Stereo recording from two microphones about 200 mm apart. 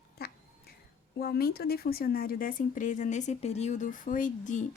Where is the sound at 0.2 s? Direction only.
50° left (ahead or behind).